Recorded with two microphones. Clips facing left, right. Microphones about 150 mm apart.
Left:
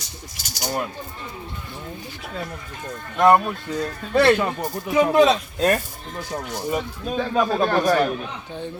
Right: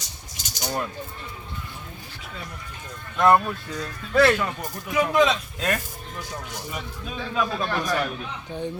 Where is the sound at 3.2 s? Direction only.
25° left (ahead or behind); by 8.1 s 45° left (ahead or behind).